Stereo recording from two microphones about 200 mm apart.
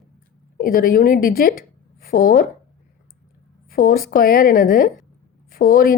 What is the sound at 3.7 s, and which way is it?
A woman's voice, 45° left (ahead or behind).